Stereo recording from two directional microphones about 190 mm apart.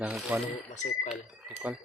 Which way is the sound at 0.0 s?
5° right (ahead or behind).